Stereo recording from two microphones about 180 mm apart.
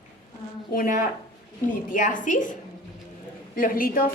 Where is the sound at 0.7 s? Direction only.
50° left (ahead or behind).